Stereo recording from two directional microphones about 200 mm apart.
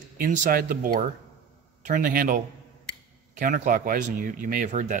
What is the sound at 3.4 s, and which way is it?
Speech, 40° right (ahead or behind).